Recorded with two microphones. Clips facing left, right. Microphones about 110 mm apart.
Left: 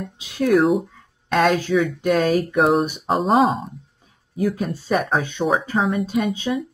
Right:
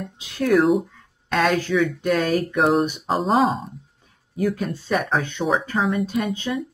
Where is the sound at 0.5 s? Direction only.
Centre (ahead or behind).